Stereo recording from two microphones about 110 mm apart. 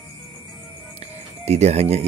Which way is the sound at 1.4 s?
75° right (ahead or behind).